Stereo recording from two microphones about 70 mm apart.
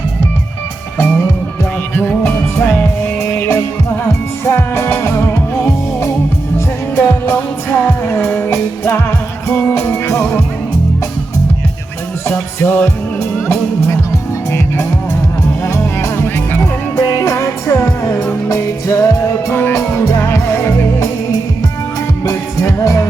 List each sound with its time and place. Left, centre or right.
2.0 s music: left
12.6 s music: left
15.6 s music: left
16.6 s music: left
17.2 s music: left
22.8 s music: left